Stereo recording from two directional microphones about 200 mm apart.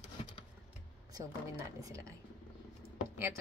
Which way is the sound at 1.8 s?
15° right (ahead or behind).